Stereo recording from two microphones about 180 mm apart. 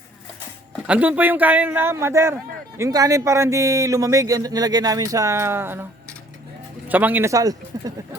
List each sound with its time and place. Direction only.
0.9 s speech: 10° right (ahead or behind)
6.8 s speech: 10° right (ahead or behind)